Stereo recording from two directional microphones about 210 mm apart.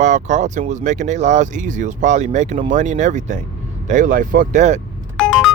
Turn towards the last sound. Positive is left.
turn(degrees=0)  # may be behind; listen again after turning